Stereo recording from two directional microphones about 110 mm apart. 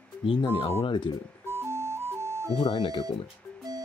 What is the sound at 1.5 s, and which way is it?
Music, 25° right (ahead or behind).